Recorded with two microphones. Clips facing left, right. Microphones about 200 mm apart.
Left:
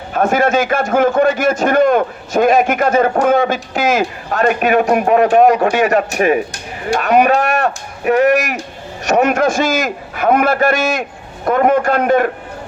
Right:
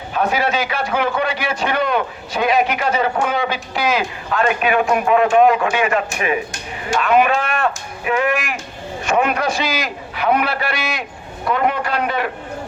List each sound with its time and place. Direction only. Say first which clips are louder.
0.1 s a man's voice: left 5 dB; 50° left (ahead or behind)